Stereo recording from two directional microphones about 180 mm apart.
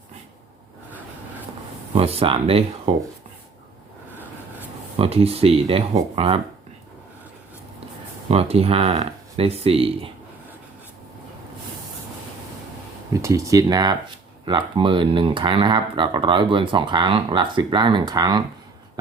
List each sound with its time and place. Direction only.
2.0 s speech: 35° right (ahead or behind)
4.9 s speech: 35° right (ahead or behind)
8.3 s speech: 35° right (ahead or behind)
13.2 s speech: 20° right (ahead or behind)